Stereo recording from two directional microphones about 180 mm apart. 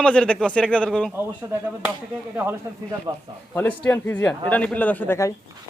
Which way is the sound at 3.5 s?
10° left (ahead or behind).